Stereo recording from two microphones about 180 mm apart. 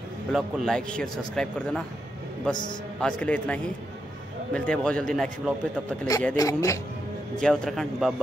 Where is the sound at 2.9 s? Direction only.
5° left (ahead or behind).